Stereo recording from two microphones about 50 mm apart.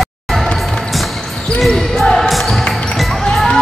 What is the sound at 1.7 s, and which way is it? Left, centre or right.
Music, centre.